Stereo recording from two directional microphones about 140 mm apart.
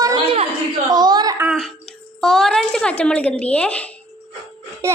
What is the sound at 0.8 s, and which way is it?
Speech, 30° right (ahead or behind).